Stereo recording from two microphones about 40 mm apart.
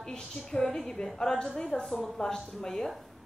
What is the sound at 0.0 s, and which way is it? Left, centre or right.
A woman's voice, centre.